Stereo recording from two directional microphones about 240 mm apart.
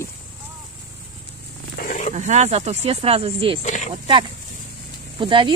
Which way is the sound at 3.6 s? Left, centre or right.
Left.